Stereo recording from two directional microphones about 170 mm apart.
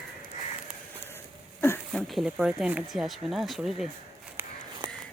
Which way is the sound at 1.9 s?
Centre (ahead or behind).